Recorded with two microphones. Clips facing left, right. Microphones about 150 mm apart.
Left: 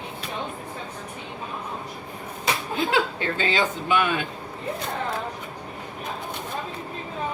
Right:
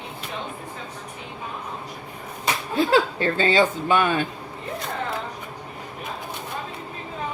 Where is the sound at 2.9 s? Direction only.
35° right (ahead or behind).